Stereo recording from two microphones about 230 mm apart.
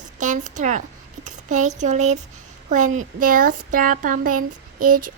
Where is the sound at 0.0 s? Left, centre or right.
Right.